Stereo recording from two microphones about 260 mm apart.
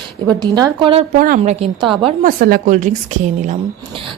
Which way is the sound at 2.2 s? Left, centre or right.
Right.